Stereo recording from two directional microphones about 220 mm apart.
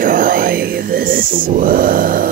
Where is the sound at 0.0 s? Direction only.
40° right (ahead or behind).